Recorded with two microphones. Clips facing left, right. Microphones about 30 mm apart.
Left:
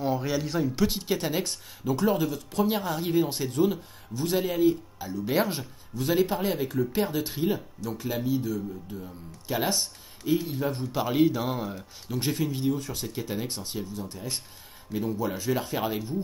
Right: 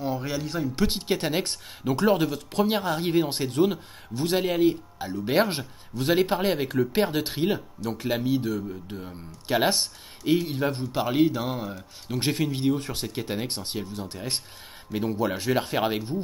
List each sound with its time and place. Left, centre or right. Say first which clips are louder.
0.0 s a man's voice: left 1 dB; centre
0.7 s a man's voice: right 1 dB; right
11.0 s speech: right 1 dB; centre
12.2 s a man's voice: right 2 dB; right
14.9 s a man's voice: right 2 dB; right
15.3 s speech: right 3 dB; right